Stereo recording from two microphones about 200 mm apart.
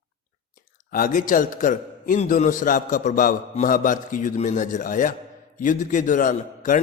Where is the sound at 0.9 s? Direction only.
45° left (ahead or behind).